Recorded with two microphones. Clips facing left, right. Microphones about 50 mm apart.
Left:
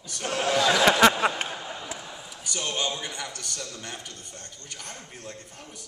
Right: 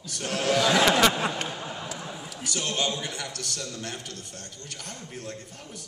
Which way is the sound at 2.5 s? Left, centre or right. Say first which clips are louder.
Right 1 dB; centre.